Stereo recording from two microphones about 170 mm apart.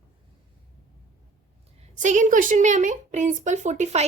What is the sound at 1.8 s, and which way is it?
A woman's voice, 45° right (ahead or behind).